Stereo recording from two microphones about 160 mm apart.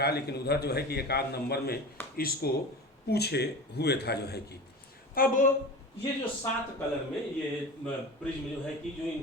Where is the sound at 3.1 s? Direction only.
85° left.